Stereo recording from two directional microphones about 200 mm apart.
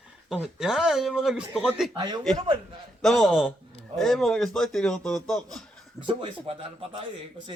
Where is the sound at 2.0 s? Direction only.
20° right (ahead or behind).